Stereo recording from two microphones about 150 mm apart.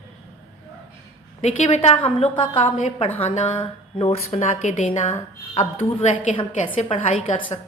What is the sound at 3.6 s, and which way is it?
A woman's voice, 35° left (ahead or behind).